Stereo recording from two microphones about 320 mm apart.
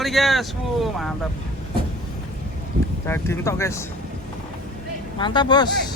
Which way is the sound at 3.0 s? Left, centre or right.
Centre.